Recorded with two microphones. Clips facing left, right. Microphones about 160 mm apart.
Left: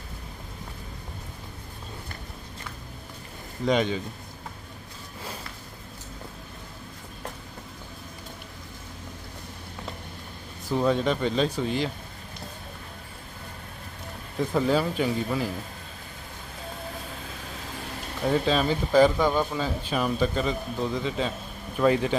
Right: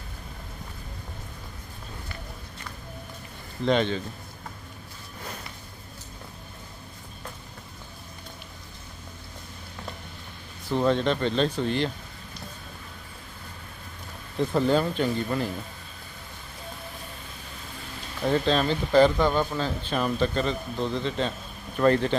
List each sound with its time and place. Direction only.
3.7 s speech: 10° left (ahead or behind)
10.7 s speech: 5° left (ahead or behind)
14.3 s speech: 5° left (ahead or behind)
18.2 s speech: 5° left (ahead or behind)